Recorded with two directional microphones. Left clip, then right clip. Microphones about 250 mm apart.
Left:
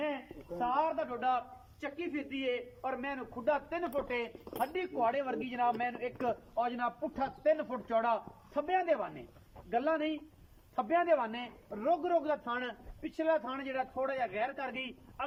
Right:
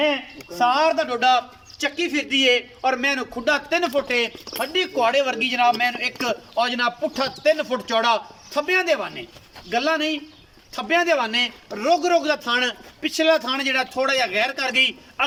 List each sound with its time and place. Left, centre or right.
0.6 s a man's voice: right